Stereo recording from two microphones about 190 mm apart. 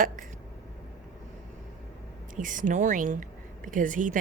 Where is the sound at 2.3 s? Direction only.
45° right (ahead or behind).